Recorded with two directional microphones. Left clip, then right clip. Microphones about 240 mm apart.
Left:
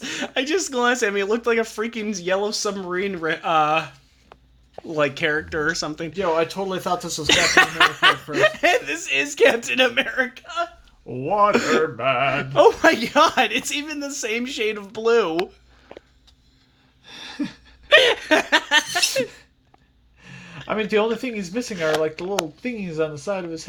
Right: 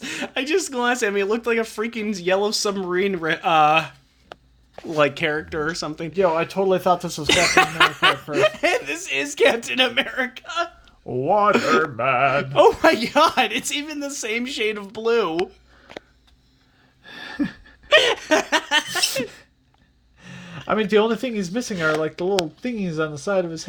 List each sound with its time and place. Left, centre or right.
0.0 s speech: centre
4.9 s speech: centre
6.1 s speech: right
7.3 s speech: centre
11.3 s speech: right
11.5 s speech: centre
11.9 s speech: right
12.4 s speech: centre
17.1 s a sound: right
17.8 s laughter: centre
20.3 s a sound: right
20.7 s speech: right